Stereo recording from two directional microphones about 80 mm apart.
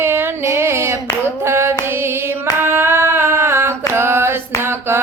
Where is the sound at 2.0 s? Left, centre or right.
Right.